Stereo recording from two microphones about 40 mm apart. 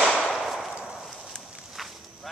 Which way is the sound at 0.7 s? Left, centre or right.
Centre.